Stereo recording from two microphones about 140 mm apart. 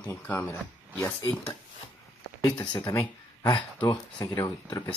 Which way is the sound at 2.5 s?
30° left (ahead or behind).